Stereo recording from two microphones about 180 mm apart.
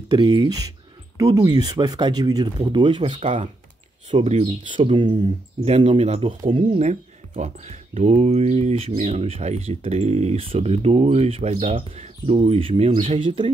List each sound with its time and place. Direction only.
0.2 s speech: 25° right (ahead or behind)